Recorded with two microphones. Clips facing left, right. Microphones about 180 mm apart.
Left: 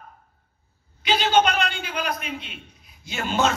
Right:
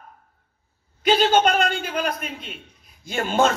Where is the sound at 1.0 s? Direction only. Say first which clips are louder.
Right 2 dB; 45° right (ahead or behind).